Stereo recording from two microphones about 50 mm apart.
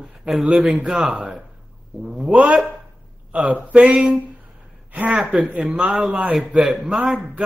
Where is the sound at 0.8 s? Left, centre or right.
Centre.